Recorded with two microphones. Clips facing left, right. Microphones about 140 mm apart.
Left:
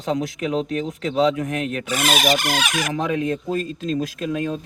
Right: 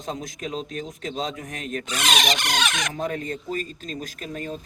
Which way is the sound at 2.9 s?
90° left.